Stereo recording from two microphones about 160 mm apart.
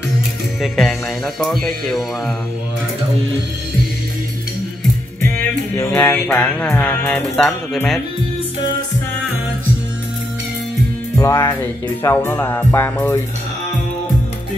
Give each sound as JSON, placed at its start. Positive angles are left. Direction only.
{"t": 0.6, "sound": "speech", "side_deg": 0}
{"t": 5.8, "sound": "music", "side_deg": 10}
{"t": 11.1, "sound": "music", "side_deg": 15}